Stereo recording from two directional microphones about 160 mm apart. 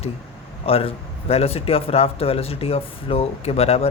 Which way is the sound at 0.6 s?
35° left (ahead or behind).